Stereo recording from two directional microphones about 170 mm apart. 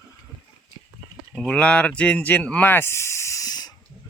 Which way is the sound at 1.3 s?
5° left (ahead or behind).